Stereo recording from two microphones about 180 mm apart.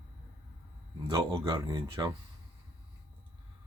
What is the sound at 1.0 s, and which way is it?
Speech, 20° right (ahead or behind).